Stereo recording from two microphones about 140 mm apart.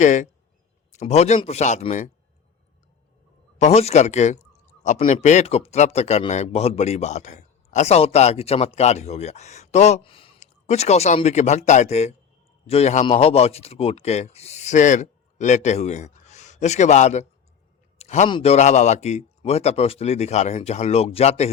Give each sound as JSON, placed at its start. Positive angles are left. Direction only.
{"t": 0.0, "sound": "speech", "side_deg": 60}
{"t": 0.9, "sound": "a man's voice", "side_deg": 50}
{"t": 3.6, "sound": "a man's voice", "side_deg": 50}
{"t": 10.0, "sound": "speech", "side_deg": 40}
{"t": 10.4, "sound": "a man's voice", "side_deg": 55}
{"t": 17.9, "sound": "a sound", "side_deg": 50}
{"t": 18.4, "sound": "a man's voice", "side_deg": 55}